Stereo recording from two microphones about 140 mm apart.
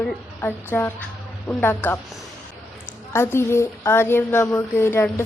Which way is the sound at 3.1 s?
20° left (ahead or behind).